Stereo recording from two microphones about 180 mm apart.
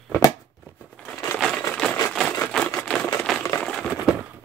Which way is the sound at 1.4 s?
5° left (ahead or behind).